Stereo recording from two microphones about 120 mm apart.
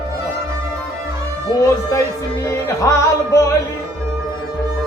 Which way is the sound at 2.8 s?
25° left (ahead or behind).